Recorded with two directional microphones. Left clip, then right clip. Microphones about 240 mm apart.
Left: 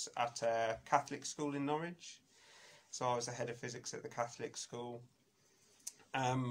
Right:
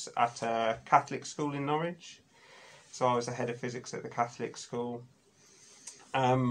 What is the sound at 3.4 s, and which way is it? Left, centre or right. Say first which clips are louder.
Speech: right 7 dB; left.